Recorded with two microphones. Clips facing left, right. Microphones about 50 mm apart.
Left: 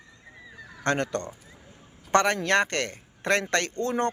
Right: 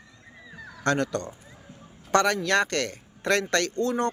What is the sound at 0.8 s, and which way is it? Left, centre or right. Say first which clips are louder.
Speech: right 1 dB; left.